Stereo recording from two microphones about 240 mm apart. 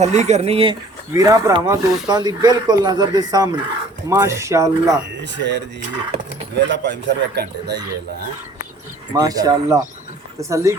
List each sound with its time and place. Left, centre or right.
0.0 s speech: right; by 4.9 s centre
5.4 s a man's voice: right
9.1 s speech: centre